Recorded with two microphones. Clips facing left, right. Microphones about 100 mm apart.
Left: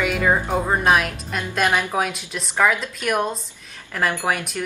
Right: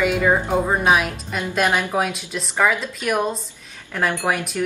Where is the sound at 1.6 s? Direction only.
15° right (ahead or behind).